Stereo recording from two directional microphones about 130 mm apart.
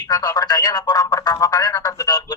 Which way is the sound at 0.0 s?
30° left (ahead or behind).